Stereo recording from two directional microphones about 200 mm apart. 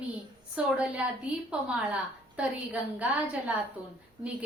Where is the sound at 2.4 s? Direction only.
5° right (ahead or behind).